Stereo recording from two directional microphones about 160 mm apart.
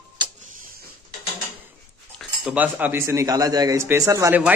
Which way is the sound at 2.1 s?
5° right (ahead or behind).